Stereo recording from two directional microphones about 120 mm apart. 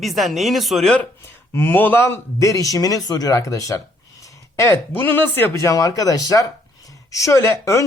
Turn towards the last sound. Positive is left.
turn(degrees=25)  # may be behind; listen again after turning